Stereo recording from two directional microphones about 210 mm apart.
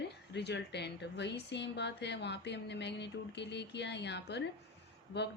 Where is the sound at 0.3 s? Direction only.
55° left (ahead or behind).